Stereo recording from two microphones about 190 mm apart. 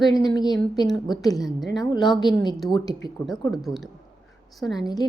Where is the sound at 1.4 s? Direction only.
Centre (ahead or behind).